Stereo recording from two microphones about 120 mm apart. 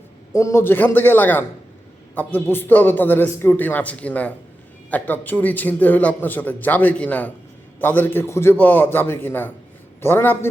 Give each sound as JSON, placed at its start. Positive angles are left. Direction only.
{"t": 0.3, "sound": "a man's voice", "side_deg": 25}